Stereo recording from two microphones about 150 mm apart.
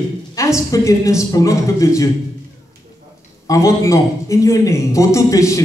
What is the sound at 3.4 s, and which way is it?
A man's voice, 20° left (ahead or behind).